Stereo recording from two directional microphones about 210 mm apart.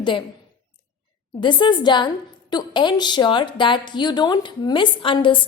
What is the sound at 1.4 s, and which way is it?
A woman's voice, 20° left (ahead or behind).